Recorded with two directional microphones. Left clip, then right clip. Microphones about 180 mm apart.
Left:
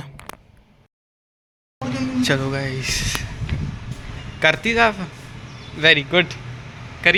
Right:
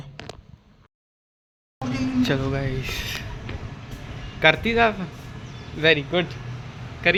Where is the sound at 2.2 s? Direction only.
5° left (ahead or behind).